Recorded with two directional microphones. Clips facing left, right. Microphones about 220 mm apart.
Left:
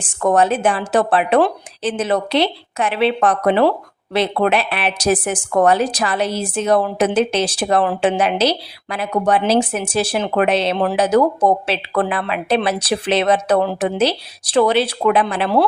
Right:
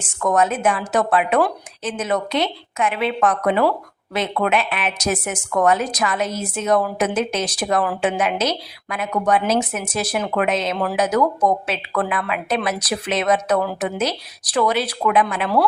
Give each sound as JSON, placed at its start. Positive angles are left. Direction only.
{"t": 0.0, "sound": "a woman's voice", "side_deg": 30}